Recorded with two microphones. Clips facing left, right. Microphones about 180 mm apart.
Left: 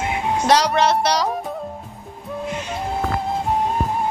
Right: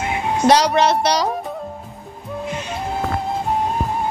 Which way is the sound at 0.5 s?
Centre (ahead or behind).